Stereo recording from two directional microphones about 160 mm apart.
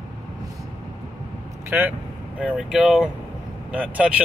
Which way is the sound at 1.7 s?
10° right (ahead or behind).